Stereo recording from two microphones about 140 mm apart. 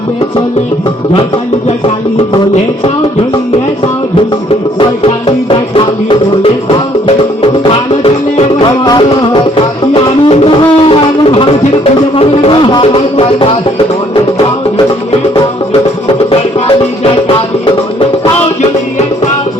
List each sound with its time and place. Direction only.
5.5 s music: 35° left (ahead or behind)
8.5 s music: 30° left (ahead or behind)
9.9 s music: 45° left (ahead or behind)
16.6 s music: 40° left (ahead or behind)